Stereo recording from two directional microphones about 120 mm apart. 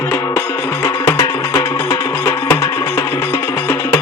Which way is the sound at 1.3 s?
25° left (ahead or behind).